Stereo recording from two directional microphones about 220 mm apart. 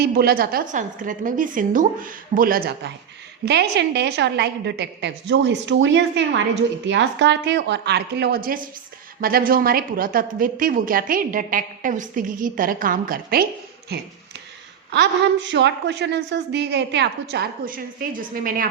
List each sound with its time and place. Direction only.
0.0 s a woman's voice: 45° right (ahead or behind)